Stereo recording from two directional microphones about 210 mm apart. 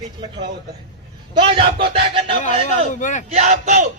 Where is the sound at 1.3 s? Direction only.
25° right (ahead or behind).